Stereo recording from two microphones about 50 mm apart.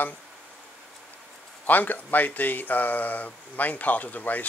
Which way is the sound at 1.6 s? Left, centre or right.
Left.